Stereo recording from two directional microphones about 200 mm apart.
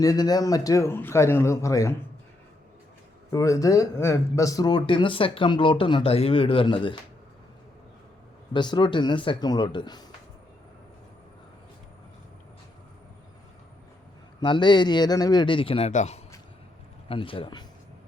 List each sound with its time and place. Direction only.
0.0 s a man's voice: 20° left (ahead or behind)
3.3 s speech: 15° left (ahead or behind)
8.5 s speech: 20° left (ahead or behind)
14.4 s speech: 20° left (ahead or behind)